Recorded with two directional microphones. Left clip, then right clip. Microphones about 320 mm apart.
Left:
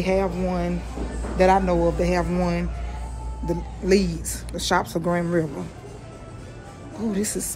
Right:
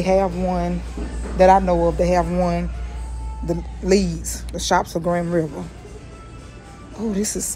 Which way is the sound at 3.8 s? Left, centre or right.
Centre.